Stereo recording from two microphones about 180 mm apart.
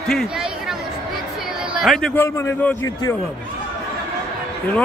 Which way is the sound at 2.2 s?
15° left (ahead or behind).